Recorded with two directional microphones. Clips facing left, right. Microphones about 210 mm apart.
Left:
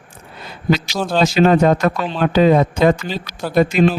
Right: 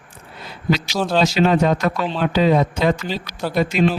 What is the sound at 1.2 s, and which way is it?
A man's voice, 50° left (ahead or behind).